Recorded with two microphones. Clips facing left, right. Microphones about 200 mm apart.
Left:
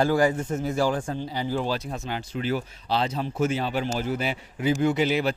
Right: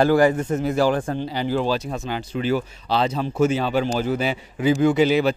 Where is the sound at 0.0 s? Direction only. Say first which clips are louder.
Right 5 dB; 65° right (ahead or behind); by 3.3 s 90° right.